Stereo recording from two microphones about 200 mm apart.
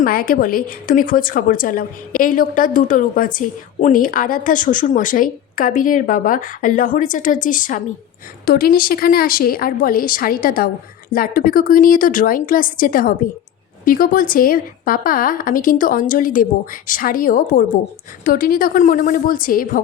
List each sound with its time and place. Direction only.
0.0 s a woman's voice: 45° left (ahead or behind)